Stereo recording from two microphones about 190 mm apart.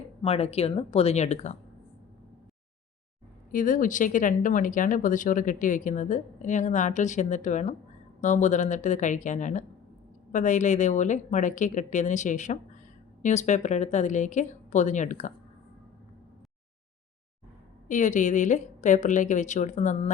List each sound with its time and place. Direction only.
0.2 s a woman's voice: 35° left (ahead or behind)
3.5 s a woman's voice: 45° left (ahead or behind)
17.8 s a woman's voice: 40° left (ahead or behind)